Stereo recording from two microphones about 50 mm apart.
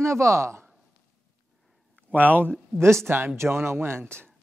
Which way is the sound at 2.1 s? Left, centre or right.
Right.